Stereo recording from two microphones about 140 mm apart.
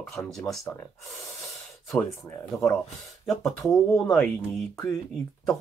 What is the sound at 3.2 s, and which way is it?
Speech, centre (ahead or behind).